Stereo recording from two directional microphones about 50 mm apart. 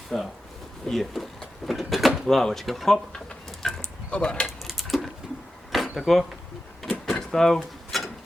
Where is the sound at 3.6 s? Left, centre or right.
Centre.